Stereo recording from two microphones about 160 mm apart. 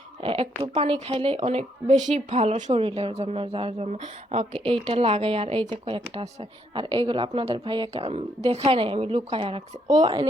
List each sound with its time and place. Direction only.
0.2 s speech: 35° right (ahead or behind)